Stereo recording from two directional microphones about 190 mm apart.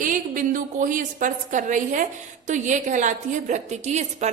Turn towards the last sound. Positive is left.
turn(degrees=-35)  # may be behind; listen again after turning